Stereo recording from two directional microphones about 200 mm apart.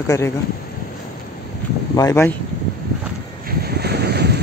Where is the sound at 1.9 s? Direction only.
15° left (ahead or behind).